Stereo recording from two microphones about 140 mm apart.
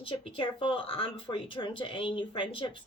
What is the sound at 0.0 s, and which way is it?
Speech, 40° left (ahead or behind).